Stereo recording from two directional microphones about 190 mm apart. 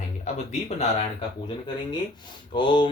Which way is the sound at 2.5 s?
25° left (ahead or behind).